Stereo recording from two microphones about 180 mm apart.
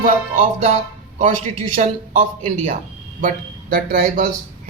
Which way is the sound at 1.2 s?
45° right (ahead or behind).